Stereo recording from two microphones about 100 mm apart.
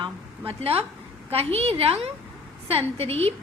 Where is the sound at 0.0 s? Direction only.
70° right (ahead or behind).